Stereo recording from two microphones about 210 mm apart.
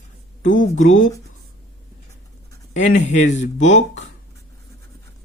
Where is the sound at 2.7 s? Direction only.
35° left (ahead or behind).